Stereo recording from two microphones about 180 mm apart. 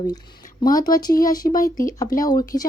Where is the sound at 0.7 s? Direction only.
50° left (ahead or behind).